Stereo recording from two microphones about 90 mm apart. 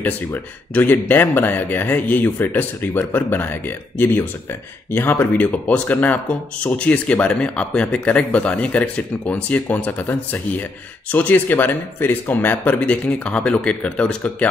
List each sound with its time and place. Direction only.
0.0 s speech: 20° left (ahead or behind)